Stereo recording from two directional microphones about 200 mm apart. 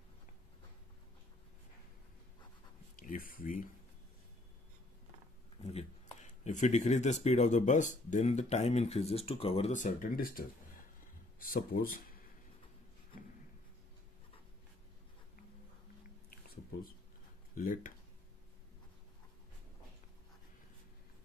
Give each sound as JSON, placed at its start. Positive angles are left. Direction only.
{"t": 3.0, "sound": "speech", "side_deg": 45}
{"t": 5.6, "sound": "speech", "side_deg": 30}
{"t": 17.6, "sound": "speech", "side_deg": 40}